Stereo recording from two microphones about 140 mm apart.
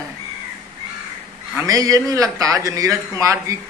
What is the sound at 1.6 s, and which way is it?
A man's voice, 25° right (ahead or behind).